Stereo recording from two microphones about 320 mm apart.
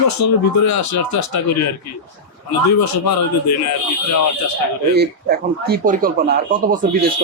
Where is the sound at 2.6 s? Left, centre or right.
Left.